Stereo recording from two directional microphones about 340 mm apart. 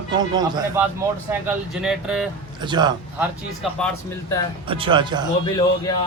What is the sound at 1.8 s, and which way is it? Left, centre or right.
Speech, centre.